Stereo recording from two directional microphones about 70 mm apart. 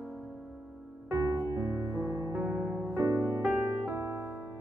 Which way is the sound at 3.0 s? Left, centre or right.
Right.